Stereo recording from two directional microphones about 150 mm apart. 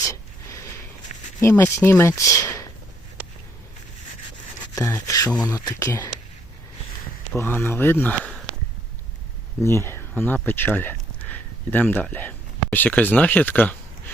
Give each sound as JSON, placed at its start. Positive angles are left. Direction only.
{"t": 0.0, "sound": "a sound", "side_deg": 20}
{"t": 1.4, "sound": "speech", "side_deg": 15}
{"t": 4.7, "sound": "speech", "side_deg": 20}
{"t": 7.3, "sound": "speech", "side_deg": 15}
{"t": 9.6, "sound": "speech", "side_deg": 15}